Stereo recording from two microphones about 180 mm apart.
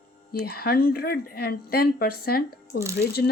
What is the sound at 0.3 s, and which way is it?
Speech, 60° left (ahead or behind).